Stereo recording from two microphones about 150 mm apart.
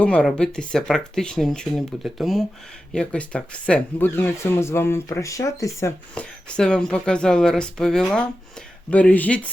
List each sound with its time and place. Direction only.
0.0 s speech: 5° left (ahead or behind)
6.1 s speech: 5° left (ahead or behind)